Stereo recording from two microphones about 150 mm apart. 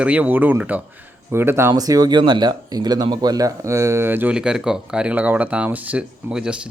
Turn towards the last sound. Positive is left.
turn(degrees=-5)  # may be behind; listen again after turning